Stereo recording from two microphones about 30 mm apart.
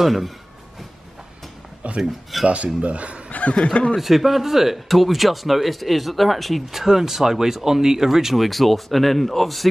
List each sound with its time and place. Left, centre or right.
0.0 s speech: centre
2.0 s speech: centre
2.4 s speech: right
3.3 s snicker: left
3.5 s speech: left
3.9 s speech: centre
8.5 s speech: centre